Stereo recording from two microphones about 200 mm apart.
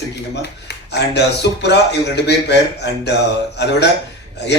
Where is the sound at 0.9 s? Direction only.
60° left (ahead or behind).